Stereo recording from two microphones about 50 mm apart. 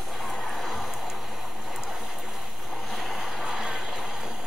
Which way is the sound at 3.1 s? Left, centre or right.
Centre.